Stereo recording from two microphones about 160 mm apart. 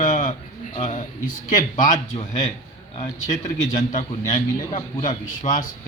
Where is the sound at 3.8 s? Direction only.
45° left (ahead or behind).